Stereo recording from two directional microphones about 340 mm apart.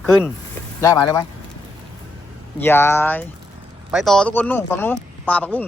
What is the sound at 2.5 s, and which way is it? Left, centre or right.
Speech, centre.